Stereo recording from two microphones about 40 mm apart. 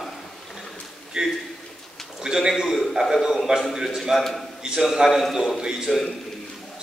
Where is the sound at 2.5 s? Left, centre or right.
Centre.